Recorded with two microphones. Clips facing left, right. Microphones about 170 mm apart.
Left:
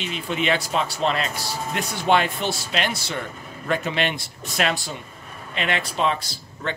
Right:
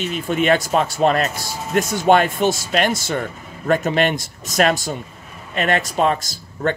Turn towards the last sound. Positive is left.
turn(degrees=-45)  # may be behind; listen again after turning